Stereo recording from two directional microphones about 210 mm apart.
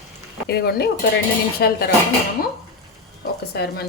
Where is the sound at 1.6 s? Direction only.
50° left (ahead or behind).